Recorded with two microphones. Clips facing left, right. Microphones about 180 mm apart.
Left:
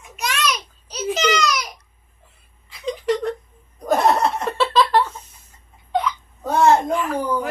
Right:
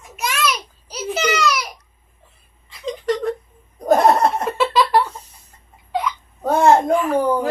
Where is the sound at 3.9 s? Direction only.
50° right (ahead or behind).